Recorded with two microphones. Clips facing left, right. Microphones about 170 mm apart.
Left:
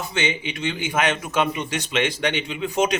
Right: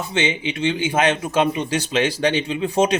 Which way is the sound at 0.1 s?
30° right (ahead or behind).